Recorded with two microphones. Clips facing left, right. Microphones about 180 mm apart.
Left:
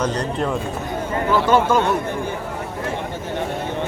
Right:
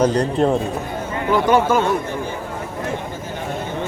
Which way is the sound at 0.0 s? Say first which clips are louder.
Right 6 dB; 30° right (ahead or behind).